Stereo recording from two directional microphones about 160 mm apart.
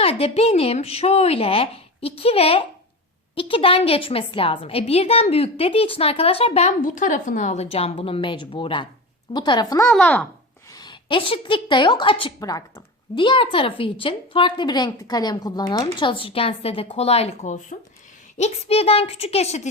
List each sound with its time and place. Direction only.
0.0 s a woman's voice: 40° left (ahead or behind); by 9.9 s 20° left (ahead or behind)
9.9 s a child's voice: 5° left (ahead or behind)
10.7 s a woman's voice: 25° left (ahead or behind); by 19.6 s 40° left (ahead or behind)